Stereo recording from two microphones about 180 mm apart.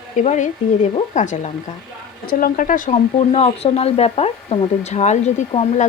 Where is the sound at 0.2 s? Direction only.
40° left (ahead or behind).